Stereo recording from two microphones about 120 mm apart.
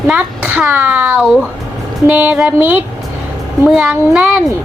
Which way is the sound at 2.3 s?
20° right (ahead or behind).